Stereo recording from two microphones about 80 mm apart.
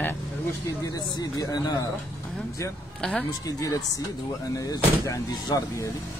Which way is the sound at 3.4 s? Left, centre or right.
Left.